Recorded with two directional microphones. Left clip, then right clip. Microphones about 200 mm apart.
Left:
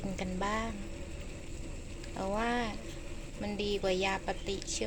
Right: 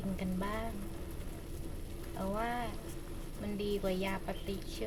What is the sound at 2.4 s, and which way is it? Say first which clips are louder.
A woman's voice: left 4 dB; 30° left (ahead or behind).